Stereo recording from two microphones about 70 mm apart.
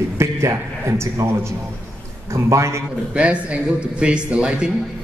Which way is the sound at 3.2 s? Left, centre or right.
Centre.